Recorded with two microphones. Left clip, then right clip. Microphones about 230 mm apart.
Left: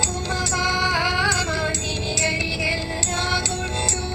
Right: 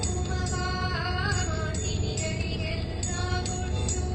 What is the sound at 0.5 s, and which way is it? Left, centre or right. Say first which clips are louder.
Music: left 11 dB; left.